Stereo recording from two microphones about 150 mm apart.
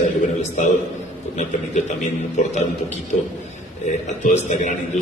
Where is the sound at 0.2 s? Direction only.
55° left (ahead or behind).